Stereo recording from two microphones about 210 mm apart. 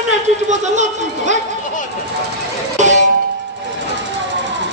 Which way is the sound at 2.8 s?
35° right (ahead or behind).